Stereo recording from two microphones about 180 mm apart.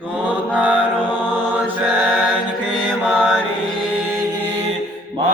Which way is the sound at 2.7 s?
5° left (ahead or behind).